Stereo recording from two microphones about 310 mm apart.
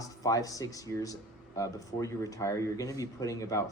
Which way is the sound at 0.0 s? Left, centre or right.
Centre.